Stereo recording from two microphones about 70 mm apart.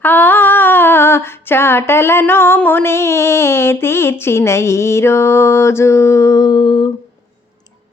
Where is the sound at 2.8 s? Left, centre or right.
Left.